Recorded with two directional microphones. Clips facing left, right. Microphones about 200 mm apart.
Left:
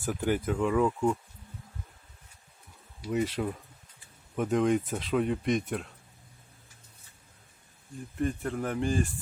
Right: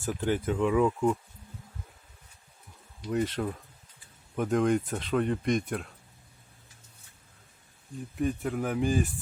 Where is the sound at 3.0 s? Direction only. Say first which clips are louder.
Even; 5° left (ahead or behind).